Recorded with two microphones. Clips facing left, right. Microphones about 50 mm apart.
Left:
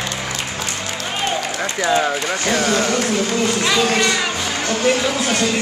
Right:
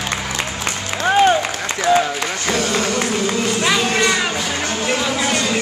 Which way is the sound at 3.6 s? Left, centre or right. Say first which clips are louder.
Right 1 dB; centre.